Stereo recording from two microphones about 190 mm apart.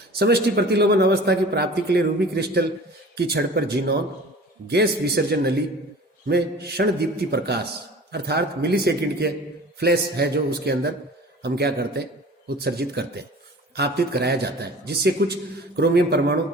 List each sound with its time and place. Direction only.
0.2 s a man's voice: 60° right (ahead or behind)